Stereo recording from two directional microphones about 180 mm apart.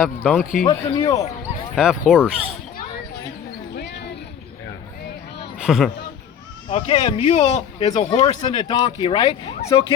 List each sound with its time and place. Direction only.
0.2 s speech: 5° left (ahead or behind)
0.6 s speech: 20° left (ahead or behind)
1.7 s speech: 5° right (ahead or behind)
3.8 s a sound: 65° left (ahead or behind)
5.5 s speech: centre (ahead or behind)
6.7 s speech: 30° left (ahead or behind)
7.9 s speech: 20° left (ahead or behind)